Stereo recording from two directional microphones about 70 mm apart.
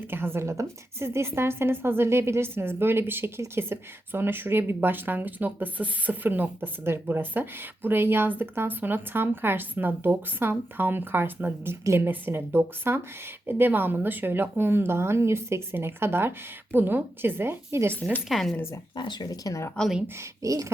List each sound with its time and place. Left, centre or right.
0.1 s speech: right
18.3 s speech: centre
18.9 s speech: left
20.4 s speech: right